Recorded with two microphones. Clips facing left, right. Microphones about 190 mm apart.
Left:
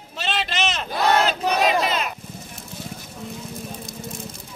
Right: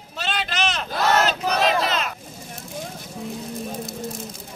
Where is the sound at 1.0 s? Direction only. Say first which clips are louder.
Left 1 dB; 10° left (ahead or behind).